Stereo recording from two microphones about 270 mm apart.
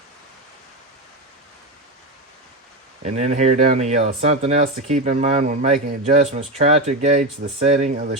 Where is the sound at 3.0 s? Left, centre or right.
Right.